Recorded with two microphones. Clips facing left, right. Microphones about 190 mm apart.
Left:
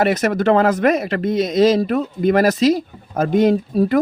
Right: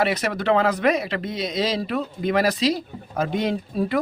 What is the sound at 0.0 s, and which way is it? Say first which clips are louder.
Speech: left 6 dB; 45° left (ahead or behind).